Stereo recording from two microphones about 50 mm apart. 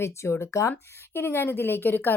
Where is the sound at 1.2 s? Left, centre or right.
Left.